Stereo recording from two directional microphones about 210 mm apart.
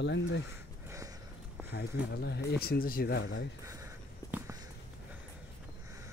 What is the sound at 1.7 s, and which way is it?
Speech, 50° left (ahead or behind).